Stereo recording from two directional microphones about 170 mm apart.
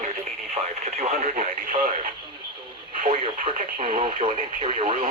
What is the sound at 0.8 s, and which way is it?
Radio, 40° right (ahead or behind).